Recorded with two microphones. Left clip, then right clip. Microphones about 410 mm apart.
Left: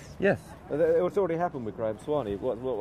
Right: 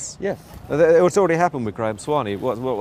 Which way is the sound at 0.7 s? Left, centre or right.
Right.